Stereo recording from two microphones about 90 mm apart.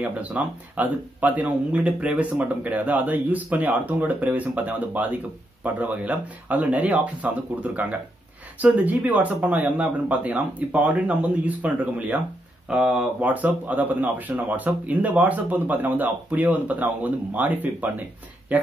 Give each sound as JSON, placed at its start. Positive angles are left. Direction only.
{"t": 0.0, "sound": "speech", "side_deg": -15}